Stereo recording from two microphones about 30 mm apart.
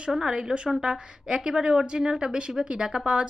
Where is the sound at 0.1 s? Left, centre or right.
Centre.